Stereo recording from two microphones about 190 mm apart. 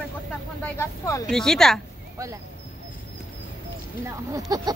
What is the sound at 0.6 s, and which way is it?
Speech, 15° left (ahead or behind).